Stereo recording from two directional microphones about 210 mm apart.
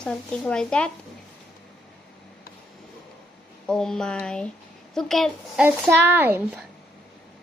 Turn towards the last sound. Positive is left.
turn(degrees=-10)  # may be behind; listen again after turning